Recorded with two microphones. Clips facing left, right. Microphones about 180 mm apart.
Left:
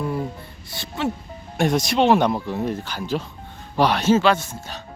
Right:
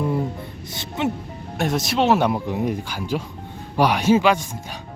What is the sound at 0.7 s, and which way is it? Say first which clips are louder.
Speech: right 1 dB; 20° right (ahead or behind).